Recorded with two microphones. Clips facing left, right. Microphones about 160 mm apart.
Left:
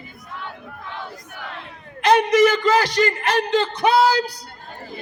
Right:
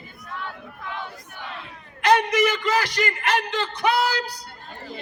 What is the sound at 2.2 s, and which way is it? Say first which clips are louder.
Speech: left 6 dB; 30° left (ahead or behind).